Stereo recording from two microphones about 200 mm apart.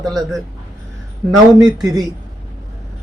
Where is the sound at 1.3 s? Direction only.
20° right (ahead or behind).